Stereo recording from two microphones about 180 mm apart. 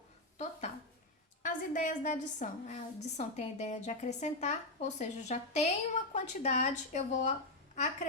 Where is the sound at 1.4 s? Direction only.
45° left (ahead or behind).